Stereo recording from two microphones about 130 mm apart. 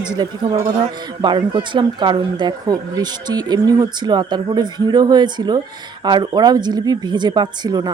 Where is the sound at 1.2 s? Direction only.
35° right (ahead or behind).